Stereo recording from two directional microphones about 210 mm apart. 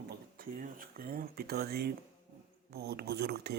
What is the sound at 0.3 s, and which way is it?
Speech, 45° right (ahead or behind).